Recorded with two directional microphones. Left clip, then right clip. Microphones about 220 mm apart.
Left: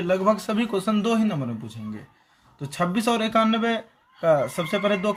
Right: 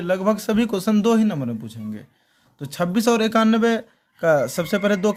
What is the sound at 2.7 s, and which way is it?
A man's voice, 40° right (ahead or behind).